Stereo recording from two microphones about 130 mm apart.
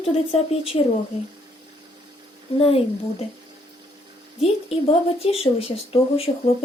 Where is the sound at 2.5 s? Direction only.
50° left (ahead or behind).